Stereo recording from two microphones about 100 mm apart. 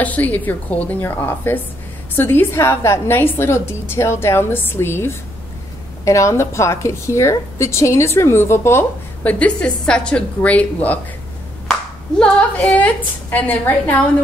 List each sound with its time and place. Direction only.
0.0 s a woman's voice: 15° left (ahead or behind)
9.2 s a woman's voice: 15° left (ahead or behind)
12.2 s a woman's voice: 10° left (ahead or behind)